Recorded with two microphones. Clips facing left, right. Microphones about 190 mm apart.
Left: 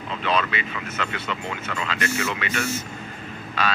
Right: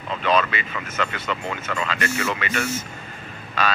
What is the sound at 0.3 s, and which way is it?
Speech, 50° right (ahead or behind).